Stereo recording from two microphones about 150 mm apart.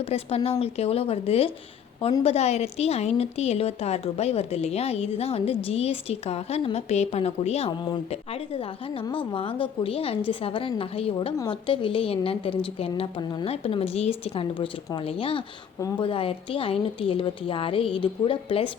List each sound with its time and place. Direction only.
0.0 s a woman's voice: 40° left (ahead or behind)